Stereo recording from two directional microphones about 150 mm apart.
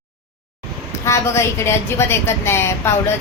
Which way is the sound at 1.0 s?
20° left (ahead or behind).